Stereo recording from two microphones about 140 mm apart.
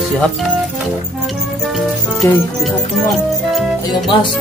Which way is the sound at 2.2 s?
15° left (ahead or behind).